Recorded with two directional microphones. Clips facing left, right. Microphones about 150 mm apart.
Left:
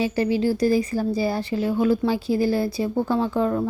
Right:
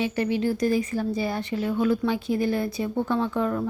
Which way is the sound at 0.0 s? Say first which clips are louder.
Left 3 dB; 35° left (ahead or behind).